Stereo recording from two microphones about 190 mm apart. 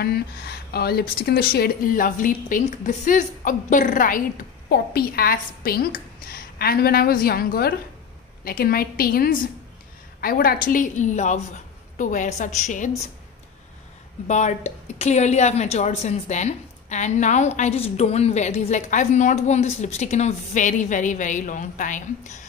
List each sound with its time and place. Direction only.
0.0 s a woman's voice: 55° left (ahead or behind); by 12.9 s 40° left (ahead or behind)
14.2 s a woman's voice: 35° left (ahead or behind)